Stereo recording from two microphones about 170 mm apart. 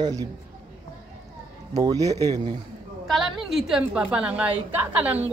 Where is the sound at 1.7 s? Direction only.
20° right (ahead or behind).